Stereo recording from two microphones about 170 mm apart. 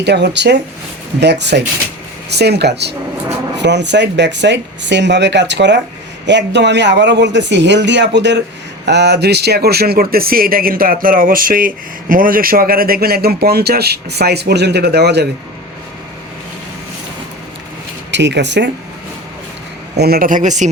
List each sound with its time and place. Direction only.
0.0 s speech: 90° right
2.3 s speech: 75° right (ahead or behind)
3.6 s speech: 90° right; by 15.3 s 75° right (ahead or behind)
18.1 s speech: 90° right
20.0 s speech: 60° right (ahead or behind); by 20.7 s 45° right (ahead or behind)